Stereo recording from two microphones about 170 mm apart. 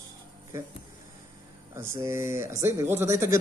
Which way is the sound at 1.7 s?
15° right (ahead or behind).